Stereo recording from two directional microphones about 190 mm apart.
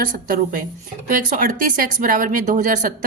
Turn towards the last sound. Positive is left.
turn(degrees=-45)  # may be behind; listen again after turning